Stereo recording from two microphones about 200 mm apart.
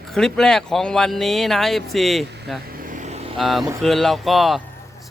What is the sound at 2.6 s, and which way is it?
Vehicle, 45° right (ahead or behind).